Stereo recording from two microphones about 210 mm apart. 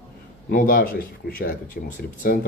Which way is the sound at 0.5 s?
40° left (ahead or behind).